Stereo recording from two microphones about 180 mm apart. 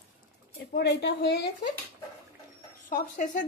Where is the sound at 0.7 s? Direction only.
65° left (ahead or behind).